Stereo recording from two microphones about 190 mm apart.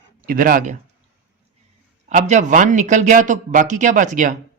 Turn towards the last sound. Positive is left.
turn(degrees=-45)  # may be behind; listen again after turning